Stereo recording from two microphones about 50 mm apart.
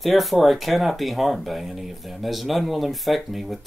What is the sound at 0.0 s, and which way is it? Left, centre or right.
Speech, centre.